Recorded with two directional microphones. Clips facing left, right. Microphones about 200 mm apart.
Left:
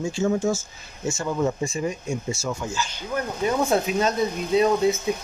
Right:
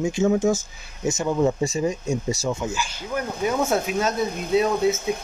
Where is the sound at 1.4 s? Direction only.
35° right (ahead or behind).